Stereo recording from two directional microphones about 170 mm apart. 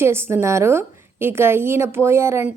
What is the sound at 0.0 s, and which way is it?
A woman's voice, 15° right (ahead or behind).